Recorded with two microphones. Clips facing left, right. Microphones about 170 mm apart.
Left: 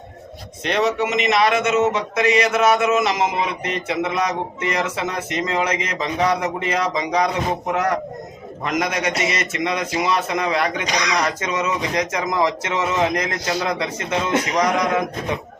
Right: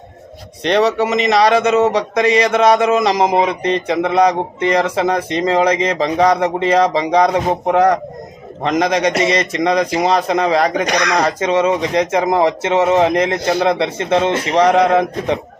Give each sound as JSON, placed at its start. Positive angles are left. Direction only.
{"t": 0.6, "sound": "speech", "side_deg": -35}
{"t": 10.8, "sound": "speech", "side_deg": -55}
{"t": 11.2, "sound": "speech", "side_deg": -30}